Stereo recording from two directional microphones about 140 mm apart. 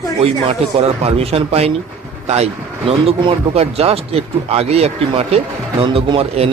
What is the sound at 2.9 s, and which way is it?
Speech, 45° right (ahead or behind).